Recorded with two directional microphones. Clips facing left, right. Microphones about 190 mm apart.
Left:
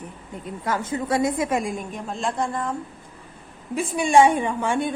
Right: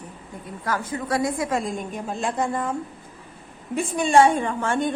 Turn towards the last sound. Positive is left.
turn(degrees=15)  # may be behind; listen again after turning